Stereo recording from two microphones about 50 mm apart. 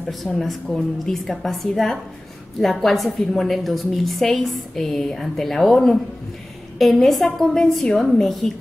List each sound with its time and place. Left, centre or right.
0.1 s a woman's voice: centre